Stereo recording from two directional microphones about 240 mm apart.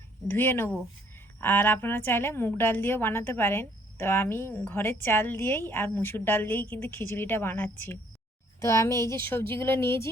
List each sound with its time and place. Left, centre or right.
0.3 s a woman's voice: centre